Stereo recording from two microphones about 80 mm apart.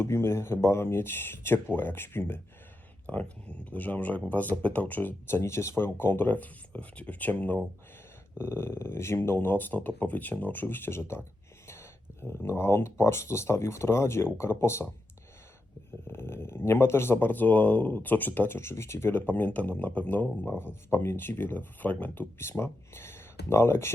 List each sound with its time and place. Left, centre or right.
0.0 s speech: left
3.1 s speech: centre; by 14.8 s left
16.0 s speech: left